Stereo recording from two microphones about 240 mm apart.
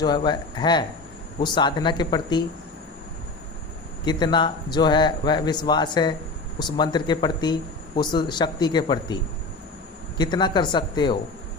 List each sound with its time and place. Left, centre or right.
0.0 s speech: centre
4.0 s speech: centre